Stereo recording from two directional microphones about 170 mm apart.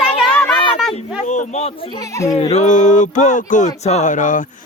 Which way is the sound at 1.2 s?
45° left (ahead or behind).